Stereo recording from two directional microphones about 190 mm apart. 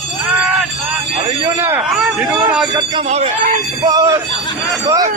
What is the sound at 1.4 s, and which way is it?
Speech, 10° right (ahead or behind).